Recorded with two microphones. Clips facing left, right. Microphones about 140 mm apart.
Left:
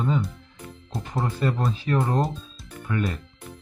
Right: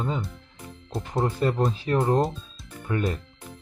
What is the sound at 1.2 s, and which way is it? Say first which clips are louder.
Speech: right 2 dB; 25° right (ahead or behind).